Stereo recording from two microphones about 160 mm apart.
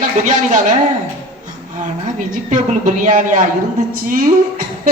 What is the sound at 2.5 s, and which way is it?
Speech, 55° right (ahead or behind).